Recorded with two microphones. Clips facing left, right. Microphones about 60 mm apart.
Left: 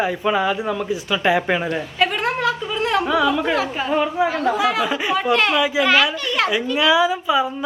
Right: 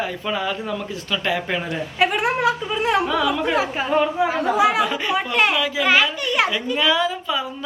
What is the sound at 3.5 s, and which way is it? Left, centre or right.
Speech, centre.